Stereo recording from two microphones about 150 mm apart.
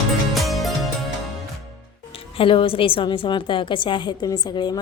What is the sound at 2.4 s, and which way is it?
A woman's voice, 35° left (ahead or behind).